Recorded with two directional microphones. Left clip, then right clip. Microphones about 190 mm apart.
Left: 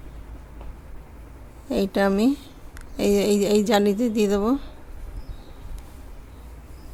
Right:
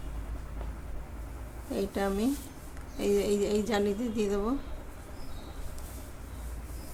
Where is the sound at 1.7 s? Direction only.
60° left (ahead or behind).